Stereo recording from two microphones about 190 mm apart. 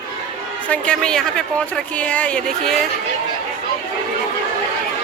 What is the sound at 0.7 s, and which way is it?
Speech, 5° left (ahead or behind).